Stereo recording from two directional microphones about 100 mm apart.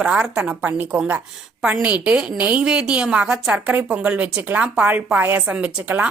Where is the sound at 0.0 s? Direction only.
10° right (ahead or behind).